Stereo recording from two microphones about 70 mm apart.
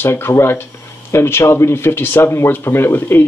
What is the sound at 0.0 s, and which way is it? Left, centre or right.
Speech, left.